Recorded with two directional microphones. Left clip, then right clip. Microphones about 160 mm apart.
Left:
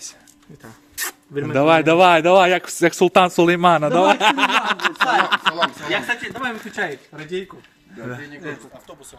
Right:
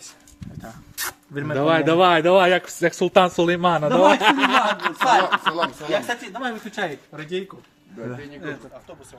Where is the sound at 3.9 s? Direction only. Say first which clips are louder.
Left 1 dB; 40° left (ahead or behind).